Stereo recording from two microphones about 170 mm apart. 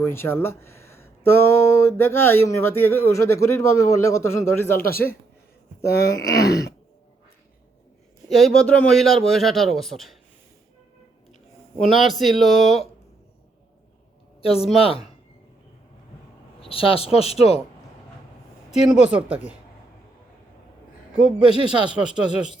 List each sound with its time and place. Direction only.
0.0 s speech: 15° left (ahead or behind)
4.8 s speech: 60° left (ahead or behind)
6.4 s groan: 80° left
8.3 s a man's voice: centre (ahead or behind)
11.8 s a man's voice: centre (ahead or behind)
14.4 s speech: 35° left (ahead or behind)
16.6 s speech: 35° left (ahead or behind)
19.0 s speech: 5° right (ahead or behind)
21.7 s a man's voice: 5° right (ahead or behind)